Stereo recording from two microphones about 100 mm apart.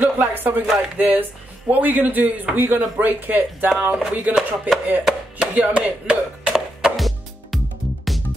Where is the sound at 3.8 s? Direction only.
10° right (ahead or behind).